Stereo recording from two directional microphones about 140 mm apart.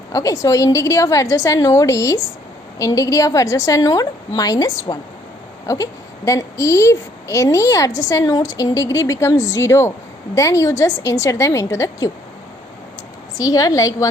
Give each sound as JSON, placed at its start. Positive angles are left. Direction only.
{"t": 0.1, "sound": "a woman's voice", "side_deg": 25}
{"t": 13.3, "sound": "a woman's voice", "side_deg": 25}